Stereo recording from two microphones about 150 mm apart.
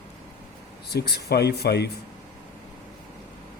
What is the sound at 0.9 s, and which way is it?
Speech, 90° left.